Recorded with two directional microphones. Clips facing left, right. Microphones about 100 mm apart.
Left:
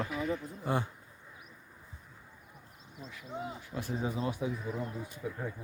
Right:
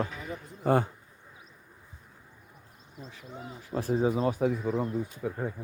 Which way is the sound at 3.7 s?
30° right (ahead or behind).